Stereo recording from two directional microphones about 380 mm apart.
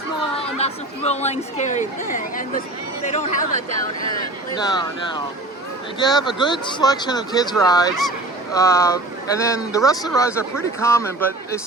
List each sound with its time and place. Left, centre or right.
0.6 s speech: centre
4.5 s speech: centre